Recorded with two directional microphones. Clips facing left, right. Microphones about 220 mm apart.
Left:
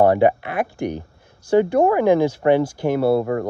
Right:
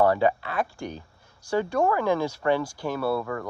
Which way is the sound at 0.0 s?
20° left (ahead or behind).